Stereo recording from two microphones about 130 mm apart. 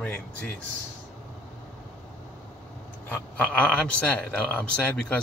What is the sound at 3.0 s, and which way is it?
Speech, 10° left (ahead or behind).